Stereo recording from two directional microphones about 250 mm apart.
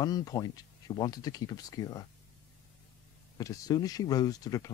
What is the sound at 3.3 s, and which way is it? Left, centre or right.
Speech, centre.